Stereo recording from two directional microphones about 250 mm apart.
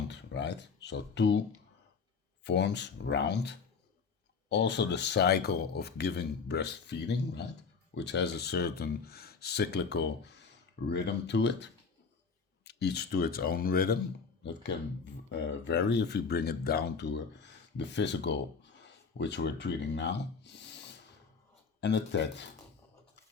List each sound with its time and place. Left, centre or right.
0.1 s speech: left
2.4 s speech: left